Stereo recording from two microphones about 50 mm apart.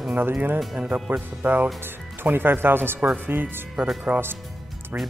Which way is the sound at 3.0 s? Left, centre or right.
Right.